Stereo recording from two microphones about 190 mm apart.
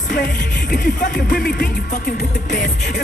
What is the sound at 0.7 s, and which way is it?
Speech, 50° left (ahead or behind).